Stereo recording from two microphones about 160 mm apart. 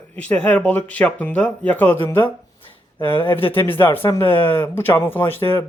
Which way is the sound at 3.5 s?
15° left (ahead or behind).